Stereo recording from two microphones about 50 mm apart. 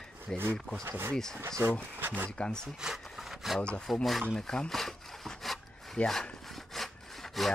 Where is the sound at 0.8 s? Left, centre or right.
Right.